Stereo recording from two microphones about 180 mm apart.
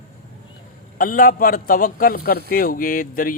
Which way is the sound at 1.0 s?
50° left (ahead or behind).